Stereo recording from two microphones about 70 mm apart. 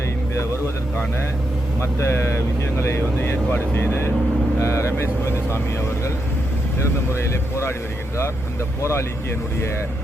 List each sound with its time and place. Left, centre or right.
1.8 s speech: left
6.8 s speech: left
8.8 s speech: left